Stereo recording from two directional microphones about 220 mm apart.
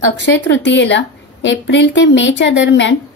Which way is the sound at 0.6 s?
55° left (ahead or behind).